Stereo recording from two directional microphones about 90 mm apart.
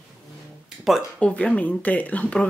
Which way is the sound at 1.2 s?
15° left (ahead or behind).